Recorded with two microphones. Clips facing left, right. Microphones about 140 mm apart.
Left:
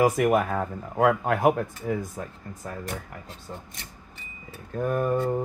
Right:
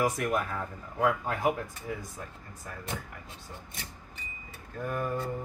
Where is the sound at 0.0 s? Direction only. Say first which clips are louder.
Left 8 dB; 65° left (ahead or behind).